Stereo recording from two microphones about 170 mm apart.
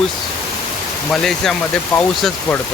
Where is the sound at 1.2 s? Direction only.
5° left (ahead or behind).